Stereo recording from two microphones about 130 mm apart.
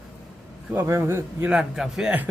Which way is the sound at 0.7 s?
20° right (ahead or behind).